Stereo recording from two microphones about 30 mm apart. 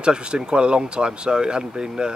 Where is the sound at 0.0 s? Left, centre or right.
Right.